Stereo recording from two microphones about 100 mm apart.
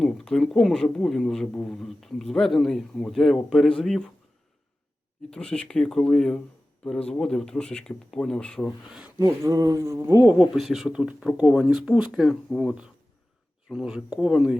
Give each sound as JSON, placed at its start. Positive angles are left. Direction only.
{"t": 0.0, "sound": "speech", "side_deg": 5}
{"t": 5.3, "sound": "speech", "side_deg": 10}
{"t": 8.9, "sound": "speech", "side_deg": -10}
{"t": 9.4, "sound": "speech", "side_deg": -35}
{"t": 10.2, "sound": "speech", "side_deg": -5}